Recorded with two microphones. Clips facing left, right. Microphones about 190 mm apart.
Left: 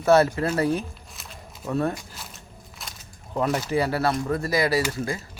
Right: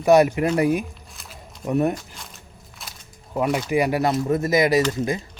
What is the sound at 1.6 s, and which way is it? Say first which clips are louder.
Speech: right 4 dB; 15° right (ahead or behind).